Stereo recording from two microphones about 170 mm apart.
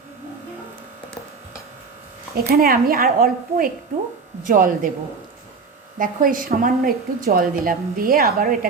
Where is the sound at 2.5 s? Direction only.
60° right (ahead or behind).